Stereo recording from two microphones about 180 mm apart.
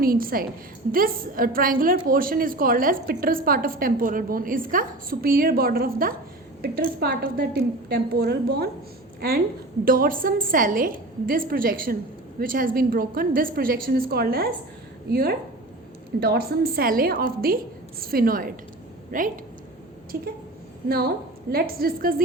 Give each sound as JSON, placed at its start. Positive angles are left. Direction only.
{"t": 0.0, "sound": "a woman's voice", "side_deg": -55}
{"t": 9.8, "sound": "a woman's voice", "side_deg": -50}
{"t": 21.5, "sound": "a woman's voice", "side_deg": -55}